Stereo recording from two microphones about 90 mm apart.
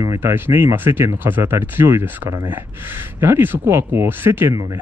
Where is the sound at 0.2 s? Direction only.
25° right (ahead or behind).